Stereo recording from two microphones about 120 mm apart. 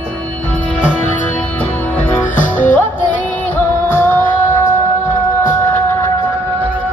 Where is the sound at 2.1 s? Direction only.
15° left (ahead or behind).